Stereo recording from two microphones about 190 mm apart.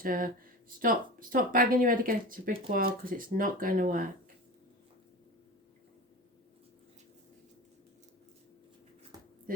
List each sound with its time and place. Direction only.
0.0 s speech: 50° right (ahead or behind)